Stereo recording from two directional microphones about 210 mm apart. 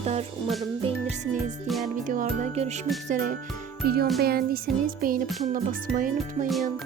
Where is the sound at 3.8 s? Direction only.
45° right (ahead or behind).